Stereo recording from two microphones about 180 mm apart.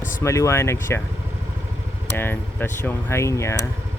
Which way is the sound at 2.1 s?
10° left (ahead or behind).